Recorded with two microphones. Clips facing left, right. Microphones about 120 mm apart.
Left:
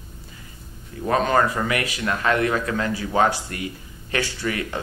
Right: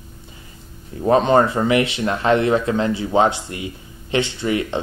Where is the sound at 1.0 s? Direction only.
25° right (ahead or behind).